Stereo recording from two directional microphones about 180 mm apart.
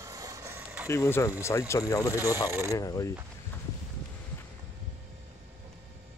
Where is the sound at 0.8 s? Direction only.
15° left (ahead or behind).